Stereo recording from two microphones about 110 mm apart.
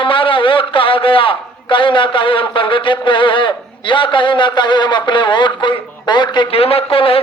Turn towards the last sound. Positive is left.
turn(degrees=55)  # may be behind; listen again after turning